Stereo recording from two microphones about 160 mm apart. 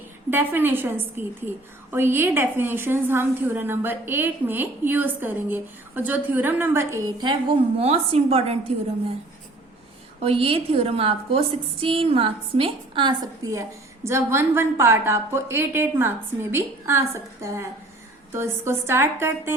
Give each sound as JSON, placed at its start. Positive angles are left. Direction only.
{"t": 0.3, "sound": "a woman's voice", "side_deg": -15}
{"t": 7.2, "sound": "a woman's voice", "side_deg": -30}
{"t": 10.2, "sound": "a woman's voice", "side_deg": -35}